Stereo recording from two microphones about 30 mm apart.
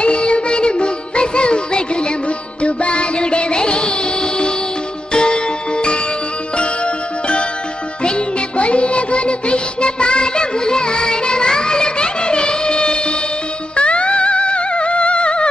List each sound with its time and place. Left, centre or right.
0.0 s music: left